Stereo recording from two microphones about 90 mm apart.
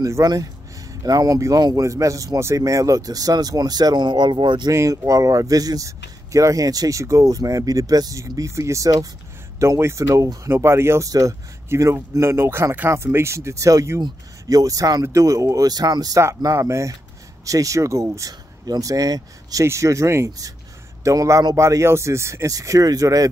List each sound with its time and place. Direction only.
0.0 s speech: 45° right (ahead or behind); by 4.7 s 60° right (ahead or behind)
4.7 s speech: 40° right (ahead or behind)
19.6 s speech: 35° right (ahead or behind)